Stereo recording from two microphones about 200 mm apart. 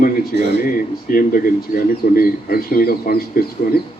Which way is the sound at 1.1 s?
45° left (ahead or behind).